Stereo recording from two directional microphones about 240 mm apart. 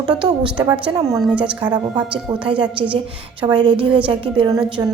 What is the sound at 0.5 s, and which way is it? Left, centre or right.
Speech, centre.